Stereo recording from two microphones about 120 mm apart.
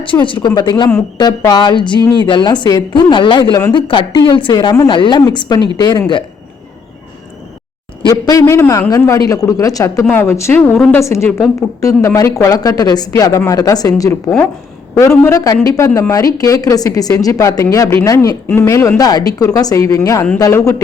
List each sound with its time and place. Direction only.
0.0 s a woman's voice: 45° left (ahead or behind)
8.0 s speech: 35° left (ahead or behind)